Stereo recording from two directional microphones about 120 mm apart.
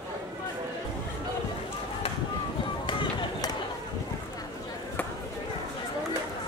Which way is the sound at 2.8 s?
45° left (ahead or behind).